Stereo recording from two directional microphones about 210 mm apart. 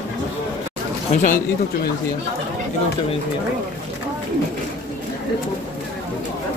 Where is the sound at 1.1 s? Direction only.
35° left (ahead or behind).